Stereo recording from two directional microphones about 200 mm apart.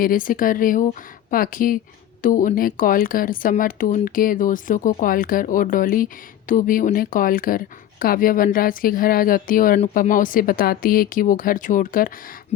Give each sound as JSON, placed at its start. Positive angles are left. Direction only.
{"t": 0.0, "sound": "a woman's voice", "side_deg": 45}